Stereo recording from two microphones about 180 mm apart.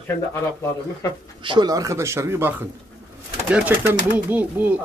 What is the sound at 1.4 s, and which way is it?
Speech, 25° right (ahead or behind).